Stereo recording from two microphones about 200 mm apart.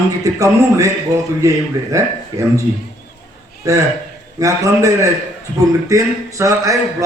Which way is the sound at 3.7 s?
15° right (ahead or behind).